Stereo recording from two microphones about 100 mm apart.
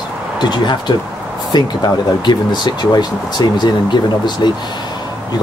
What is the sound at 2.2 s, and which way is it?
Speech, 45° left (ahead or behind).